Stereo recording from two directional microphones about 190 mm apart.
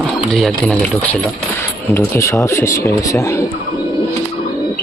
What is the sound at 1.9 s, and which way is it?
Speech, 15° left (ahead or behind).